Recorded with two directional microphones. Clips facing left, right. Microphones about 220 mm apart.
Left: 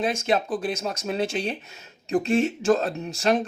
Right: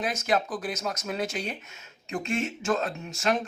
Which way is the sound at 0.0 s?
30° left (ahead or behind).